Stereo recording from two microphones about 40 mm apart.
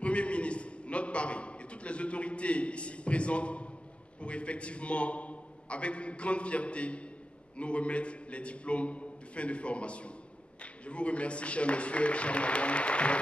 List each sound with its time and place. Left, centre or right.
0.0 s a man's voice: left